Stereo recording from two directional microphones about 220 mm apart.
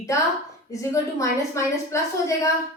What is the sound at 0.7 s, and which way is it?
A woman's voice, 15° left (ahead or behind).